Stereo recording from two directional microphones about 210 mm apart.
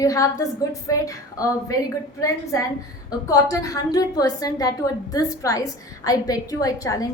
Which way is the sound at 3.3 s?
15° left (ahead or behind).